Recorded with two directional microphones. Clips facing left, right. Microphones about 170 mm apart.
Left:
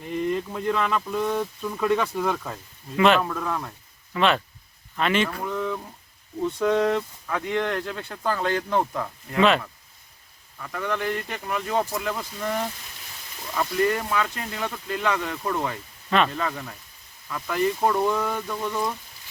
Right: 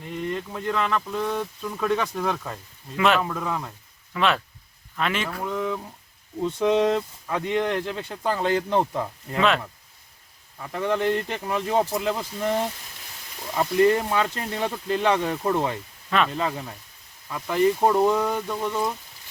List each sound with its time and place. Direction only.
0.1 s a sound: 5° left (ahead or behind)
0.6 s speech: 10° left (ahead or behind); by 5.9 s 10° right (ahead or behind)
6.7 s speech: 20° right (ahead or behind)
10.6 s speech: 30° right (ahead or behind)
16.0 s speech: centre (ahead or behind)
16.3 s speech: 20° right (ahead or behind)